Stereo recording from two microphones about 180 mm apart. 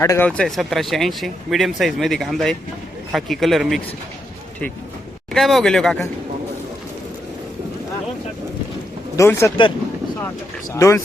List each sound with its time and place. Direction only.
0.0 s speech: 15° left (ahead or behind)
0.3 s speech: 5° left (ahead or behind)
5.3 s speech: centre (ahead or behind)
9.1 s speech: 15° left (ahead or behind)
10.8 s speech: 15° left (ahead or behind)